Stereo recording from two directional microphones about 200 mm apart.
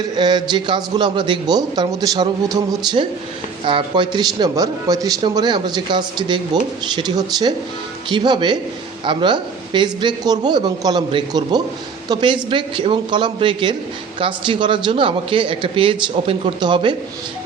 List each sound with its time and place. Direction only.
0.2 s a man's voice: 20° right (ahead or behind)